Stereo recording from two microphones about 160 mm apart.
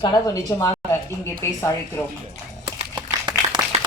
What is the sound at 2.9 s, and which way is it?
Clapping, 25° right (ahead or behind).